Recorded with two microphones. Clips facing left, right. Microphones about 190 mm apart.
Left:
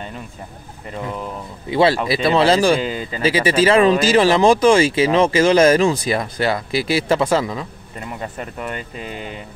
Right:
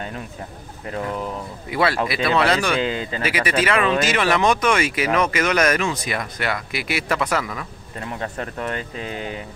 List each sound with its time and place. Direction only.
1.7 s speech: 25° left (ahead or behind)
2.8 s speech: 5° left (ahead or behind)
3.2 s speech: 30° left (ahead or behind)
8.1 s speech: 5° left (ahead or behind)